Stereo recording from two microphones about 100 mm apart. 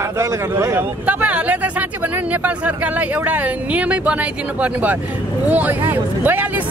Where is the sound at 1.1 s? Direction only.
15° right (ahead or behind).